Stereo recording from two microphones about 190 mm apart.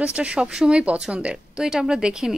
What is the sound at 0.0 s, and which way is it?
A woman's voice, 5° right (ahead or behind).